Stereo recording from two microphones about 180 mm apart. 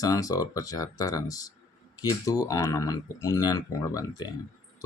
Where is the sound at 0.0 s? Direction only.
20° left (ahead or behind).